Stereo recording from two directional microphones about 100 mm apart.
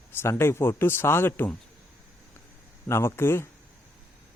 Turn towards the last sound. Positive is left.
turn(degrees=25)  # may be behind; listen again after turning